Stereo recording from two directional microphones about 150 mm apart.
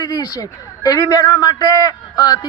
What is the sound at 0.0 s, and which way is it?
A man's voice, 25° left (ahead or behind).